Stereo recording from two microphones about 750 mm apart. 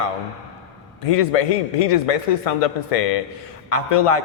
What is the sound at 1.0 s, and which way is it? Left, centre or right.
A man's voice, left.